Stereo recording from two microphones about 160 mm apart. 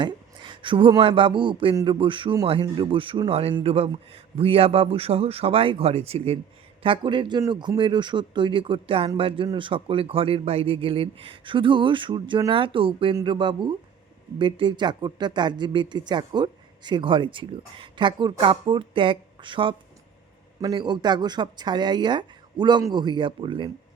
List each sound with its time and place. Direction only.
0.0 s speech: 30° right (ahead or behind)